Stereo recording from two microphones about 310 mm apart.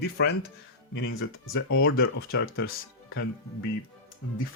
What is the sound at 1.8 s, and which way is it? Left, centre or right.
Speech, left.